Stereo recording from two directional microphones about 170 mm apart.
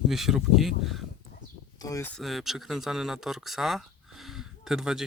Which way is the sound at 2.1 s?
Centre (ahead or behind).